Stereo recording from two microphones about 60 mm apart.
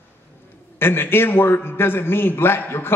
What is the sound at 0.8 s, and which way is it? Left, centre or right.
A man's voice, left.